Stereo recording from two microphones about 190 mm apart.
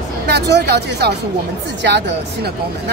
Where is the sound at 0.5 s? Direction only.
60° right (ahead or behind).